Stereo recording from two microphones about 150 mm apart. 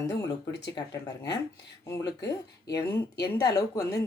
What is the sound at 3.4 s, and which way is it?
Speech, 25° left (ahead or behind).